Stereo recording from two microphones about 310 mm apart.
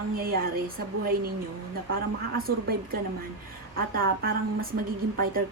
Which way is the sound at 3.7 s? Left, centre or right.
Right.